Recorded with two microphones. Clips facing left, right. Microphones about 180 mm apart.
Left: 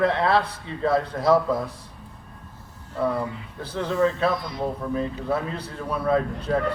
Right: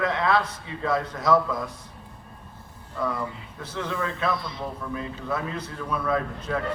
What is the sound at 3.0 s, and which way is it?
A man's voice, 30° left (ahead or behind).